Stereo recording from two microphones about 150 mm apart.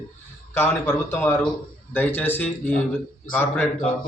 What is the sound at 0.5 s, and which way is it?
A man's voice, 15° left (ahead or behind).